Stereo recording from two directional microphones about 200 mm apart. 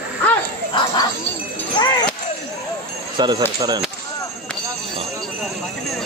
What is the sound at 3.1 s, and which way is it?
Speech, 20° right (ahead or behind).